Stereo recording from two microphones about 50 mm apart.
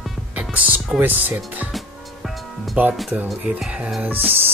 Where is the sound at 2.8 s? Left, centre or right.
Right.